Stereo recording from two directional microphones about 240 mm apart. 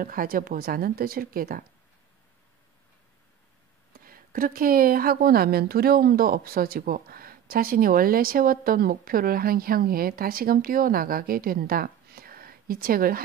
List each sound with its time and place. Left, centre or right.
0.0 s speech: right
3.9 s speech: right